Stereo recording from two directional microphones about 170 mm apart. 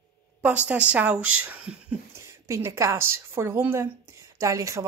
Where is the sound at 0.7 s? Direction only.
10° right (ahead or behind).